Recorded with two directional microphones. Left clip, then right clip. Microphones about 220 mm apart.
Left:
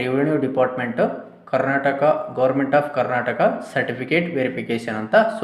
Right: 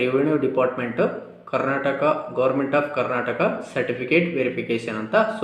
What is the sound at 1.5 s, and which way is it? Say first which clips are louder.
Speech: left 3 dB; 30° left (ahead or behind).